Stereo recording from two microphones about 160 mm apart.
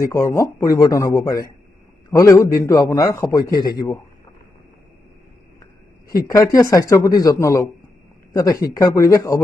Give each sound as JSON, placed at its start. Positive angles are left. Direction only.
{"t": 0.1, "sound": "speech", "side_deg": 20}
{"t": 6.1, "sound": "speech", "side_deg": 20}